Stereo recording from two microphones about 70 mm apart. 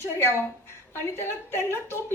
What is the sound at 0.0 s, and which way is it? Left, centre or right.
A woman's voice, left.